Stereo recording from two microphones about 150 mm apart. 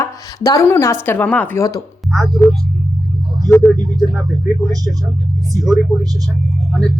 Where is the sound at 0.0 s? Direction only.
20° left (ahead or behind).